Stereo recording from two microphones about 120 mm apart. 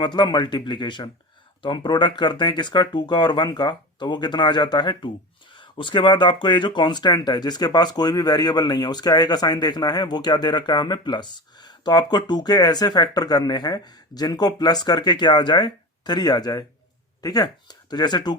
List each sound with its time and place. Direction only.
0.0 s speech: 40° left (ahead or behind)